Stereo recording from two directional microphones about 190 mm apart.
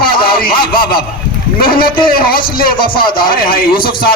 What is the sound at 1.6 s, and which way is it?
Speech, 50° left (ahead or behind).